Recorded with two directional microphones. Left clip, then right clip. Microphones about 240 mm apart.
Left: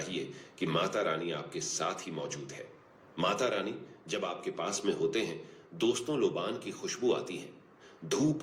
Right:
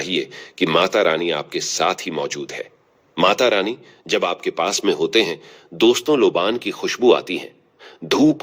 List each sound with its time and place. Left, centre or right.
0.0 s speech: right